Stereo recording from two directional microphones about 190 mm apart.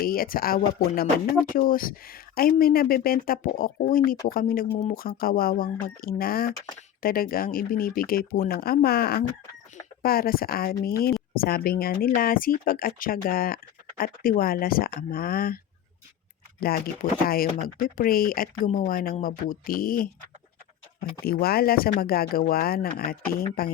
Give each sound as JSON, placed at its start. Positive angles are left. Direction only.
{"t": 0.0, "sound": "speech", "side_deg": 50}
{"t": 4.7, "sound": "speech", "side_deg": 35}
{"t": 4.9, "sound": "speech", "side_deg": 50}
{"t": 21.2, "sound": "speech", "side_deg": 55}